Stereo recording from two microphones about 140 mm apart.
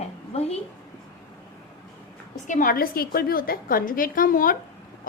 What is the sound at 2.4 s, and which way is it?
A woman's voice, 70° left (ahead or behind).